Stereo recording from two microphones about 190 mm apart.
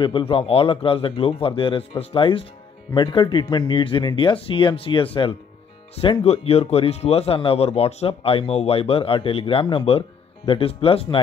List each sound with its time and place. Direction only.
0.0 s a man's voice: 25° left (ahead or behind)